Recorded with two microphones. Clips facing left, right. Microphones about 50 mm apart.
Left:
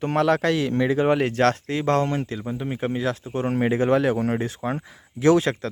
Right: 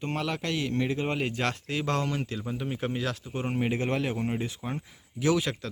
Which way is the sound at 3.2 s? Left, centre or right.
Left.